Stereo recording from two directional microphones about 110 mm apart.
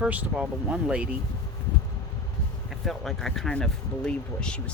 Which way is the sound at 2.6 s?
Centre (ahead or behind).